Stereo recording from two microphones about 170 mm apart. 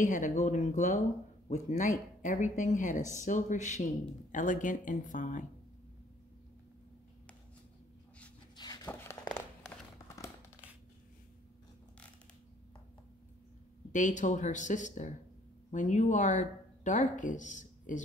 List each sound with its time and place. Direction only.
0.0 s speech: 45° left (ahead or behind)
8.5 s a sound: 25° left (ahead or behind)
13.9 s speech: 45° left (ahead or behind)